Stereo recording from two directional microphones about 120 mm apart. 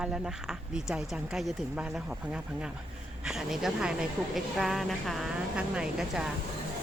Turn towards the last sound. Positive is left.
turn(degrees=-5)  # may be behind; listen again after turning